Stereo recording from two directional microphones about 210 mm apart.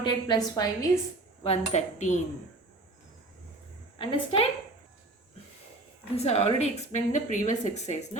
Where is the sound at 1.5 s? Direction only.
35° left (ahead or behind).